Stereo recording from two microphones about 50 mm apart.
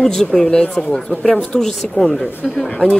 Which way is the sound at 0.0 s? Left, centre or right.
Centre.